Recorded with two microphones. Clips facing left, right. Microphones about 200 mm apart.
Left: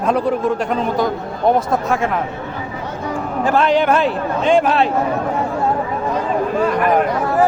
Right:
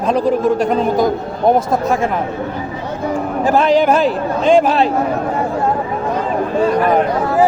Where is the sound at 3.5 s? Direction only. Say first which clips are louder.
Right 2 dB; 40° right (ahead or behind).